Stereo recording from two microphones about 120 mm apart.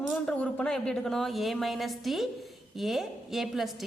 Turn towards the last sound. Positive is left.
turn(degrees=0)  # may be behind; listen again after turning